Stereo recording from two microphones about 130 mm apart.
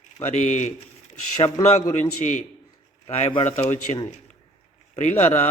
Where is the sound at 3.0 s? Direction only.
55° left (ahead or behind).